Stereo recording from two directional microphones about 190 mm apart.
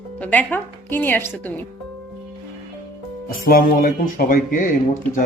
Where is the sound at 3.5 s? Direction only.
50° left (ahead or behind).